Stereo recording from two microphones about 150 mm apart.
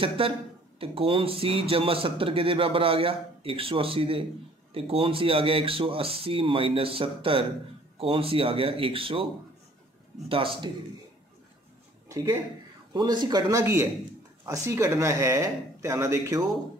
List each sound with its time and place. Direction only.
0.2 s speech: 35° right (ahead or behind)
12.1 s speech: 20° right (ahead or behind)